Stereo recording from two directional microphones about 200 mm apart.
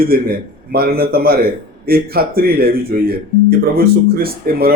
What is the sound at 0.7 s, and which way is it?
Speech, 50° right (ahead or behind).